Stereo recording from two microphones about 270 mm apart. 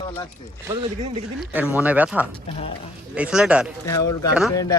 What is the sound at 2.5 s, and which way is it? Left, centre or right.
Speech, left.